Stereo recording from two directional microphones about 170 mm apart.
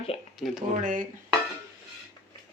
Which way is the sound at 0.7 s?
50° right (ahead or behind).